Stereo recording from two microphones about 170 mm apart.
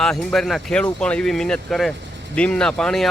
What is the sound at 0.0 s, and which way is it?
Speech, 5° left (ahead or behind).